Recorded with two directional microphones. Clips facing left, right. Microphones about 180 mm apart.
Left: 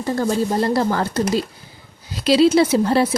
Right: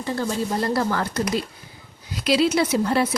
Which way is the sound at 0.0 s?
40° left (ahead or behind).